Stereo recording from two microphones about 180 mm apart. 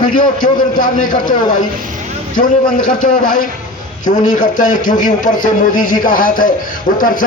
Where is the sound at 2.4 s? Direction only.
45° left (ahead or behind).